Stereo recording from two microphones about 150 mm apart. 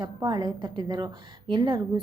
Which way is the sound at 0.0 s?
30° right (ahead or behind).